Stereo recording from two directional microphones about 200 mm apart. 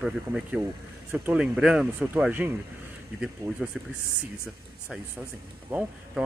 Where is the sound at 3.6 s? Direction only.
5° right (ahead or behind).